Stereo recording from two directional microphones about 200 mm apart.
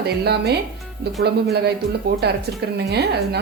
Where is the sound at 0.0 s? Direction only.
55° right (ahead or behind).